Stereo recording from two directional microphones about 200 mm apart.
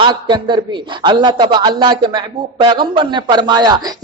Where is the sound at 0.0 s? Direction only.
20° right (ahead or behind).